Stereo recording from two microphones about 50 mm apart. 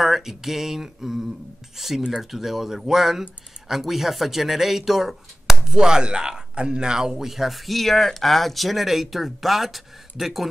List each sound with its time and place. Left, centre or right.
0.0 s speech: centre